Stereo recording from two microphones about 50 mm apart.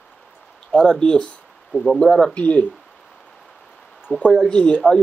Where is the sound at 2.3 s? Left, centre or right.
Left.